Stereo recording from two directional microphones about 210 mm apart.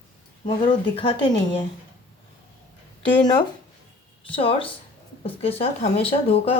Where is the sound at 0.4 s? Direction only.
20° left (ahead or behind).